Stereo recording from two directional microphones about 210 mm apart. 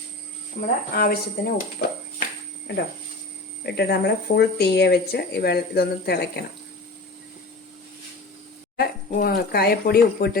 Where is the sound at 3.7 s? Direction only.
50° left (ahead or behind).